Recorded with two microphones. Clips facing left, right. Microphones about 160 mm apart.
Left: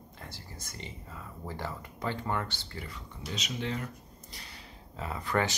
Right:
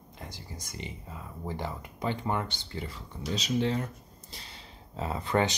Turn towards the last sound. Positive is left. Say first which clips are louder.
# right 3 dB
turn(degrees=-20)  # may be behind; listen again after turning